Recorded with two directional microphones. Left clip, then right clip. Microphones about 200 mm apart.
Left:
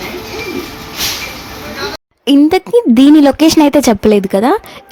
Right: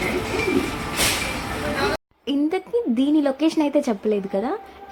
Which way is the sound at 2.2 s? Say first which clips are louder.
Left 15 dB; 50° left (ahead or behind).